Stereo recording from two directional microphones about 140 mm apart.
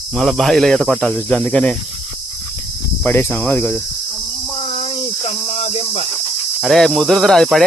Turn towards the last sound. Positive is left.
turn(degrees=0)  # may be behind; listen again after turning